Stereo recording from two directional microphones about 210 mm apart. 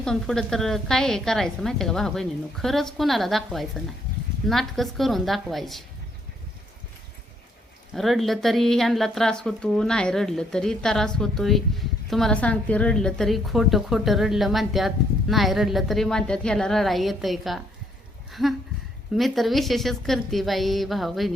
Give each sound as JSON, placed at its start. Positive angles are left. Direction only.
{"t": 0.0, "sound": "a woman's voice", "side_deg": 5}
{"t": 7.9, "sound": "a woman's voice", "side_deg": 0}
{"t": 18.3, "sound": "a sound", "side_deg": 0}
{"t": 19.1, "sound": "a woman's voice", "side_deg": 0}